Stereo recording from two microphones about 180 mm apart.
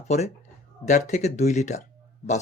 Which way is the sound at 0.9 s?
40° left (ahead or behind).